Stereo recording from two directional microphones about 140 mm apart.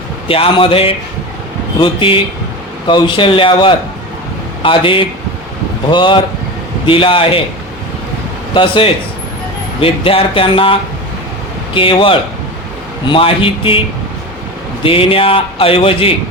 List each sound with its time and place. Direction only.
0.3 s speech: 40° left (ahead or behind)
8.5 s speech: 40° left (ahead or behind)
14.8 s speech: 40° left (ahead or behind)